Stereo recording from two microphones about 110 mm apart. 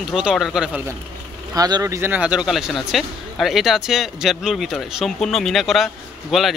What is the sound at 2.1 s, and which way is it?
Speech, 10° right (ahead or behind).